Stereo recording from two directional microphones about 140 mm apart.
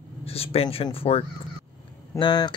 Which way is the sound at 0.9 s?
45° left (ahead or behind).